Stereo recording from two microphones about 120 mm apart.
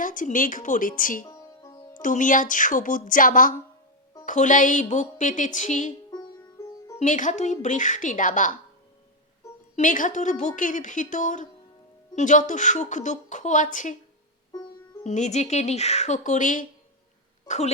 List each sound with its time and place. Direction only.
0.0 s a woman's voice: 90° left
1.3 s music: 25° left (ahead or behind)
2.0 s a woman's voice: 90° left
6.1 s music: 35° left (ahead or behind)
7.0 s a woman's voice: 90° left
9.7 s a woman's voice: 90° left
15.0 s speech: 75° left (ahead or behind)